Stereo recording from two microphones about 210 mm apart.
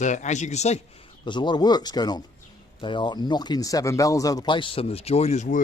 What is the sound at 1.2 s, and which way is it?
Speech, 20° left (ahead or behind).